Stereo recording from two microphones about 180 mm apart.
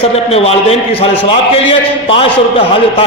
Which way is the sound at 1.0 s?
30° left (ahead or behind).